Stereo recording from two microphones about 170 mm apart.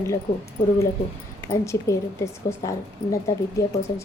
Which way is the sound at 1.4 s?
15° left (ahead or behind).